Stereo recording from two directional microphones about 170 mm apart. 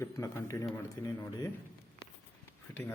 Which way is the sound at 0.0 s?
20° left (ahead or behind).